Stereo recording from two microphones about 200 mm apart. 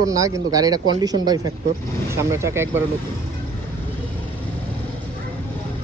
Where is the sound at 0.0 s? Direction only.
15° right (ahead or behind).